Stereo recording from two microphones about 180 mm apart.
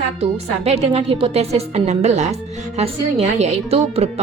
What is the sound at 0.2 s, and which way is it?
A woman's voice, 35° right (ahead or behind).